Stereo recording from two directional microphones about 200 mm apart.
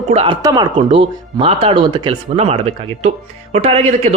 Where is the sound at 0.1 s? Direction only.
25° right (ahead or behind).